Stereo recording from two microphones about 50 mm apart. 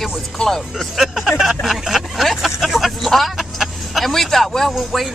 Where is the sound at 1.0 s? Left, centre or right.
Centre.